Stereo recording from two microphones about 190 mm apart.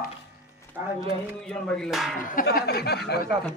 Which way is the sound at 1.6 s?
5° left (ahead or behind).